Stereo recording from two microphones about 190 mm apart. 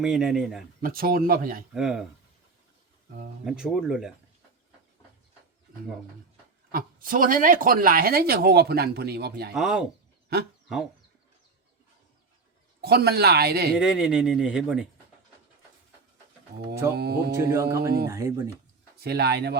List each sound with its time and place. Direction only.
0.0 s speech: 5° right (ahead or behind)
0.8 s speech: 50° right (ahead or behind)
1.7 s speech: 5° right (ahead or behind)
3.4 s speech: 5° right (ahead or behind)
6.7 s speech: 50° right (ahead or behind)
9.6 s speech: 5° right (ahead or behind)
10.3 s speech: 55° right (ahead or behind)
12.8 s speech: 55° right (ahead or behind)
13.7 s speech: 5° right (ahead or behind)
17.0 s speech: 55° right (ahead or behind)
17.5 s speech: 15° right (ahead or behind)
19.0 s speech: 60° right (ahead or behind)